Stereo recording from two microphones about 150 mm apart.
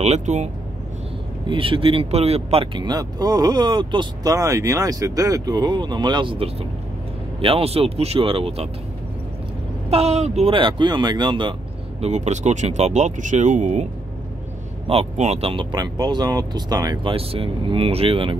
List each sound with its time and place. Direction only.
0.0 s speech: 45° right (ahead or behind)
1.5 s speech: 35° right (ahead or behind)
9.8 s speech: 45° right (ahead or behind)
12.0 s speech: 50° right (ahead or behind)
14.9 s speech: 45° right (ahead or behind)